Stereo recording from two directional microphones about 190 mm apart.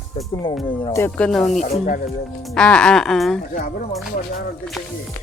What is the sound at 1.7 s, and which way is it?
Speech, 35° left (ahead or behind).